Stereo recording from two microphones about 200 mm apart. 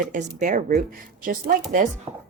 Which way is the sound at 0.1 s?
40° right (ahead or behind).